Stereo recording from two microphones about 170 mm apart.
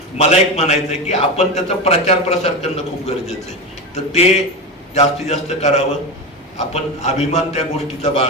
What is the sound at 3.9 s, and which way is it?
A man's voice, 40° left (ahead or behind).